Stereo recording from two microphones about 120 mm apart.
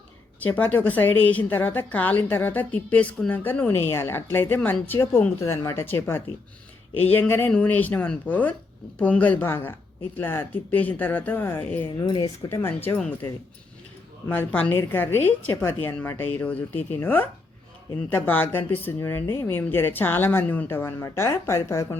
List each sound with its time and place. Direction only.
0.3 s a woman's voice: 15° left (ahead or behind)
11.9 s speech: 40° left (ahead or behind)
12.2 s speech: 25° left (ahead or behind)
14.3 s a woman's voice: 15° left (ahead or behind)